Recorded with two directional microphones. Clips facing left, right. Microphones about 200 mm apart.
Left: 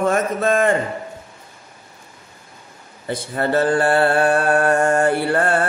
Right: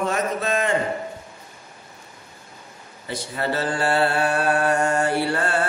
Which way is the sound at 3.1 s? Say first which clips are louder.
Left 6 dB; 50° left (ahead or behind).